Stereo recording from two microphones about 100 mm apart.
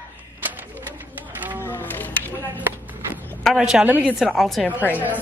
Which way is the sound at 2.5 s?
20° right (ahead or behind).